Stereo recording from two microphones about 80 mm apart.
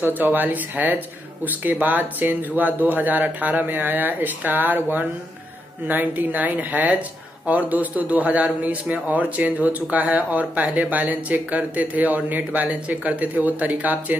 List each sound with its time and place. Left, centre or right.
0.0 s speech: right